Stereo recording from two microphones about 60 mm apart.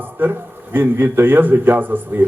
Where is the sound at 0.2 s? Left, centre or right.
Right.